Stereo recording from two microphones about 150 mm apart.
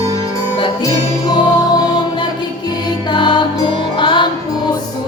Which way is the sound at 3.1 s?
30° left (ahead or behind).